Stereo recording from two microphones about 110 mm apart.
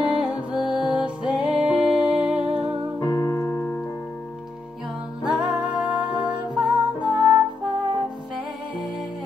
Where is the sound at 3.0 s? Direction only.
35° left (ahead or behind); by 3.8 s 15° left (ahead or behind).